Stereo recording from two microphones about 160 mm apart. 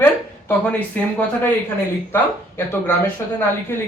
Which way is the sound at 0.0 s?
10° left (ahead or behind).